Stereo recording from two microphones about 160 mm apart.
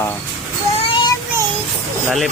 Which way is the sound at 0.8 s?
30° left (ahead or behind).